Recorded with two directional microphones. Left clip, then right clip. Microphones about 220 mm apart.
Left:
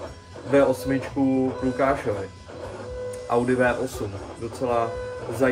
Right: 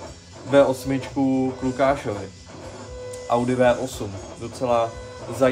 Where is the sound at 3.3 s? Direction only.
10° right (ahead or behind).